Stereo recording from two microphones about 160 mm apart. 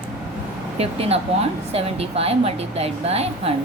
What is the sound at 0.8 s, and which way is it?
A woman's voice, 40° right (ahead or behind).